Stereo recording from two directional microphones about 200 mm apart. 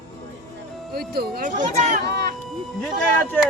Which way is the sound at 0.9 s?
50° right (ahead or behind).